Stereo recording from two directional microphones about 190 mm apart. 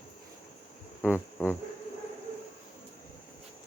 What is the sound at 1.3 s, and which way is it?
Speech, 10° left (ahead or behind).